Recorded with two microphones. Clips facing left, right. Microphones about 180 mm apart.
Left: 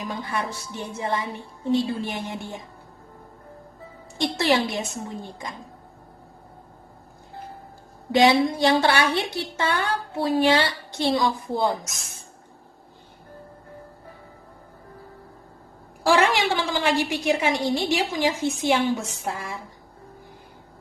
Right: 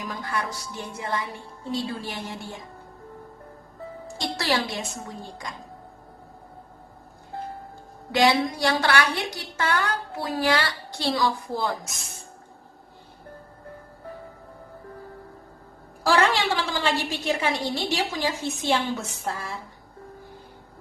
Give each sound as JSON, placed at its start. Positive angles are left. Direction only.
{"t": 0.0, "sound": "music", "side_deg": 25}
{"t": 0.9, "sound": "a woman's voice", "side_deg": 25}
{"t": 4.2, "sound": "a woman's voice", "side_deg": 20}
{"t": 8.1, "sound": "a woman's voice", "side_deg": 20}
{"t": 16.0, "sound": "a woman's voice", "side_deg": 15}